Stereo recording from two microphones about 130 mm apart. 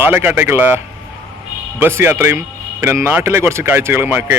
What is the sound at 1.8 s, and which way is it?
A man's voice, 20° right (ahead or behind).